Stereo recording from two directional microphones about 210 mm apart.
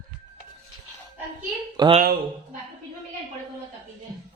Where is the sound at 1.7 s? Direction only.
20° right (ahead or behind).